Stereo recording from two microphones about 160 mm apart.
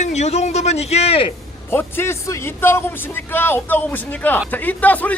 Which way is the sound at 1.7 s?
15° left (ahead or behind).